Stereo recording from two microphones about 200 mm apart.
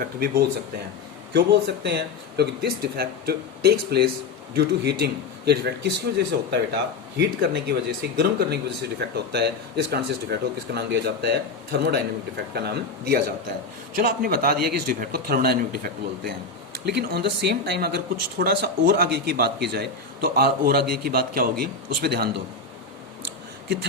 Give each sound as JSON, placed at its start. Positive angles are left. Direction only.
{"t": 0.0, "sound": "speech", "side_deg": -50}